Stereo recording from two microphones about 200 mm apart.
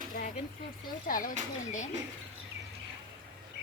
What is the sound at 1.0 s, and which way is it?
Speech, 45° left (ahead or behind).